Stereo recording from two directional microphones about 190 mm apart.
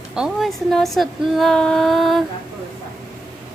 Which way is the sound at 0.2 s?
Centre (ahead or behind).